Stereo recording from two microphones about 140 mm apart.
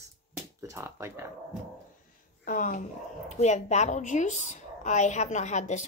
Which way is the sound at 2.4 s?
70° left (ahead or behind).